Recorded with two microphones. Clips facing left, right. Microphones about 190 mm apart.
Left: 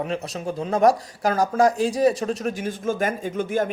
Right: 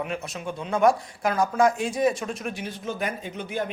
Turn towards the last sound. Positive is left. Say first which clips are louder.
# left 7 dB
turn(degrees=45)  # may be behind; listen again after turning